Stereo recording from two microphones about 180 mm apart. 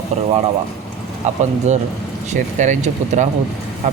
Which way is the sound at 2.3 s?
40° right (ahead or behind).